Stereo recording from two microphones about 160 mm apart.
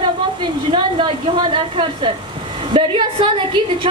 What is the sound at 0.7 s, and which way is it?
A woman's voice, 30° right (ahead or behind).